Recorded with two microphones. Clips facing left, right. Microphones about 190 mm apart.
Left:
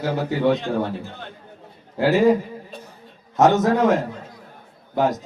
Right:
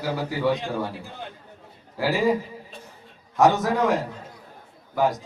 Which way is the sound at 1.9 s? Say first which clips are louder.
Left 6 dB; 20° left (ahead or behind).